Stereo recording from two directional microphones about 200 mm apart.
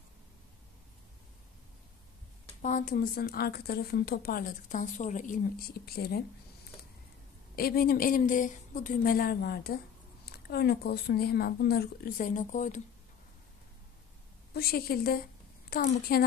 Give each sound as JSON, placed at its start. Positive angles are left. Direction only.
{"t": 2.6, "sound": "a woman's voice", "side_deg": 40}
{"t": 7.5, "sound": "a woman's voice", "side_deg": 50}
{"t": 14.5, "sound": "a woman's voice", "side_deg": 50}